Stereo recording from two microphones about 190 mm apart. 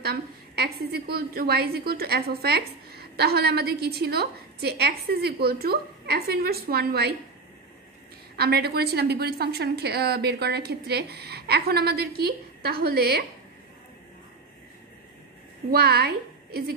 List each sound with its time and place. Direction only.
0.0 s a woman's voice: 55° right (ahead or behind)
8.4 s a woman's voice: 55° right (ahead or behind)
15.7 s a woman's voice: 55° right (ahead or behind)